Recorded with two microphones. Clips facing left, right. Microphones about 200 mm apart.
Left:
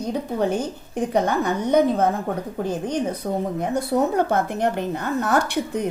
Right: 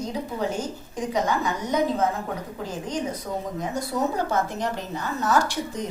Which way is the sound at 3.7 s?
60° left (ahead or behind).